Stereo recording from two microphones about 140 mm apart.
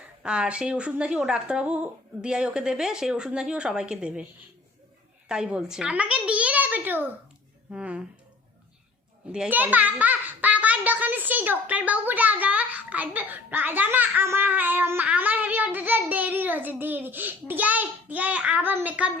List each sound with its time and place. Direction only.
0.2 s a child's voice: 5° right (ahead or behind)
5.3 s a child's voice: 5° right (ahead or behind)
9.3 s a child's voice: 10° right (ahead or behind)